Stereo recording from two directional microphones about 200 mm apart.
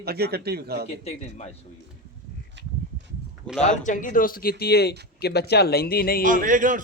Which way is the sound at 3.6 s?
40° left (ahead or behind).